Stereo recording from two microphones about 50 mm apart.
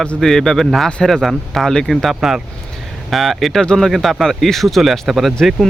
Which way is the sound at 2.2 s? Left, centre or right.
Centre.